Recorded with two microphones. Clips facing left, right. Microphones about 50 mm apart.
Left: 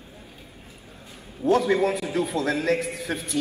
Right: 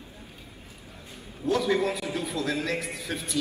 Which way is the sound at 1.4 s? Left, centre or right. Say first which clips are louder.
Left 4 dB; left.